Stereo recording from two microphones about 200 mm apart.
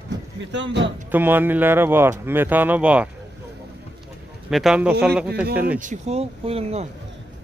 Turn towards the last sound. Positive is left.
turn(degrees=-30)  # may be behind; listen again after turning